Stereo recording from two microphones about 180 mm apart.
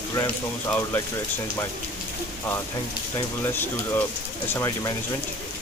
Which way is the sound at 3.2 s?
10° left (ahead or behind).